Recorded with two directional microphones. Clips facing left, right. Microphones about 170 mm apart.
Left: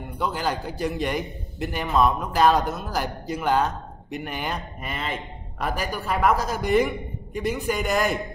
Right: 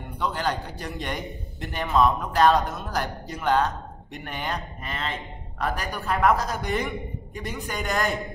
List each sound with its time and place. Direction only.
0.2 s a man's voice: 5° left (ahead or behind)